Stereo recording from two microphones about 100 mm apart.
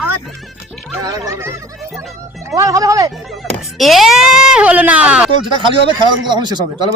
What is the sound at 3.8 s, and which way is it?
Speech, centre (ahead or behind).